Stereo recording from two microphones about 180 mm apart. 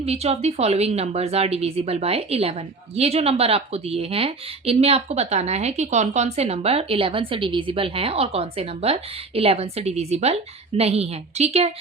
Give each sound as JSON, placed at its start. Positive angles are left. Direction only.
{"t": 0.0, "sound": "a woman's voice", "side_deg": -35}